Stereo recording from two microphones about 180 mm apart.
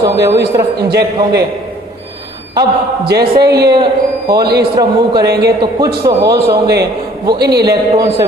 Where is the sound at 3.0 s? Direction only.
60° right (ahead or behind).